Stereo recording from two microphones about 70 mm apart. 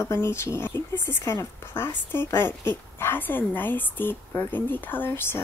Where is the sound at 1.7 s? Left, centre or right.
Left.